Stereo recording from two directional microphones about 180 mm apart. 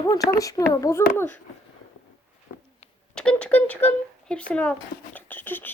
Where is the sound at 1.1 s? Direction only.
15° left (ahead or behind).